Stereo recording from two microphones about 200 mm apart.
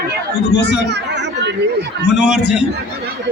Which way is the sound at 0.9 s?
60° right (ahead or behind).